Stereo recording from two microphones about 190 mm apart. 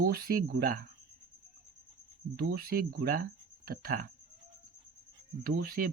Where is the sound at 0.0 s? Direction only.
50° right (ahead or behind).